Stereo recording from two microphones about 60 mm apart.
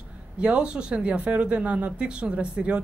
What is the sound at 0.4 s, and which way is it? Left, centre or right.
Speech, centre.